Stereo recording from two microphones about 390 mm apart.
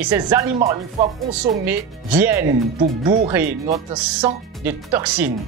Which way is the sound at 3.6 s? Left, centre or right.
Centre.